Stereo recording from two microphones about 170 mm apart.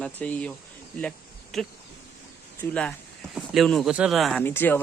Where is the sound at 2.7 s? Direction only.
5° left (ahead or behind).